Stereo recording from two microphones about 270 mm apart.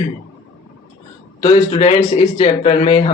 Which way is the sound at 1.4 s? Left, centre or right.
Centre.